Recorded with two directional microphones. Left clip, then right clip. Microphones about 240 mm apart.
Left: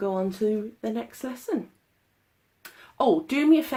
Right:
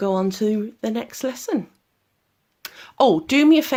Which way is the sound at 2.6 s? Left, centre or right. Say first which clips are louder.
Right 6 dB; right.